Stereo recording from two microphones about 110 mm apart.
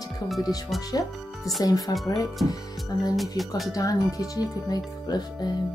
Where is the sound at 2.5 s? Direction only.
35° left (ahead or behind).